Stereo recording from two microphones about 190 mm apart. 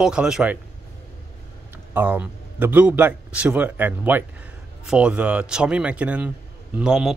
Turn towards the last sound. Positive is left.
turn(degrees=-5)  # may be behind; listen again after turning